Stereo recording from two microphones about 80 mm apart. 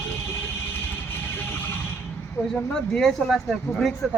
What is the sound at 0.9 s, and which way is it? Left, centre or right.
Music, left.